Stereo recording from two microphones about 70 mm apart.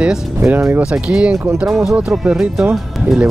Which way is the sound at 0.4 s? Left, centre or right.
Right.